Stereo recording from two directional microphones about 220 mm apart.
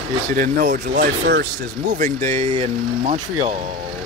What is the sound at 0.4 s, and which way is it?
Speech, 45° right (ahead or behind).